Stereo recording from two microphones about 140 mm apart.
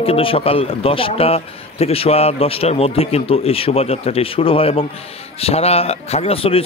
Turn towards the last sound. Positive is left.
turn(degrees=45)  # may be behind; listen again after turning